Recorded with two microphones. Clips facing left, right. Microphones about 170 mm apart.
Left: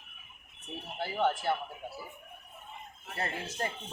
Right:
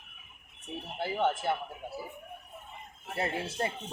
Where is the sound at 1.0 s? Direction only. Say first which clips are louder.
Right 1 dB; 15° right (ahead or behind).